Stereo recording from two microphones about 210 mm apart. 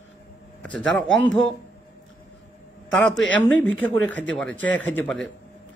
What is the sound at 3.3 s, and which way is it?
A man's voice, 10° left (ahead or behind).